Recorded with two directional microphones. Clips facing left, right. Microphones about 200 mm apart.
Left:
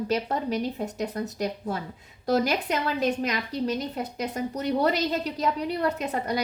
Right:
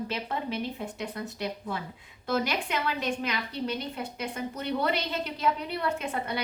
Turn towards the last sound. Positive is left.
turn(degrees=40)  # may be behind; listen again after turning